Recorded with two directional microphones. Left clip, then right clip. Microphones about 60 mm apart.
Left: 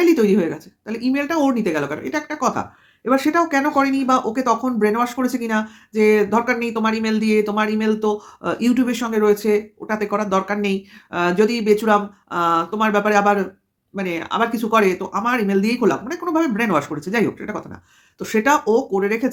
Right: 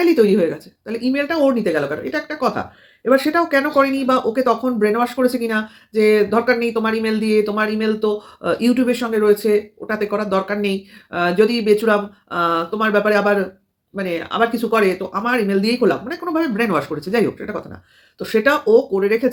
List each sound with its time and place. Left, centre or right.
0.0 s speech: left